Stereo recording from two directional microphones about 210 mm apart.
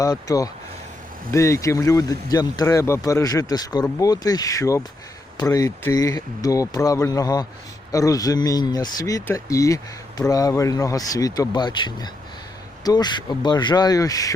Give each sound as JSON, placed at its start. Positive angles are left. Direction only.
{"t": 0.0, "sound": "speech", "side_deg": 15}